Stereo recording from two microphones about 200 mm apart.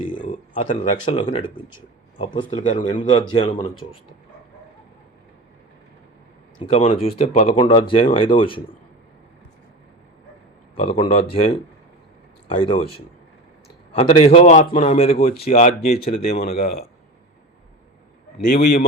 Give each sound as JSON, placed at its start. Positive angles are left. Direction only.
{"t": 0.0, "sound": "a sound", "side_deg": 40}
{"t": 0.5, "sound": "speech", "side_deg": 30}
{"t": 6.7, "sound": "a man's voice", "side_deg": 30}
{"t": 10.8, "sound": "speech", "side_deg": 25}
{"t": 13.9, "sound": "a man's voice", "side_deg": 30}
{"t": 18.6, "sound": "speech", "side_deg": 50}